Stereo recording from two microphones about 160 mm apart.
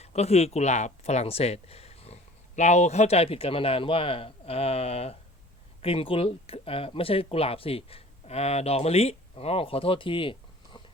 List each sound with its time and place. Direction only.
0.0 s speech: 40° left (ahead or behind)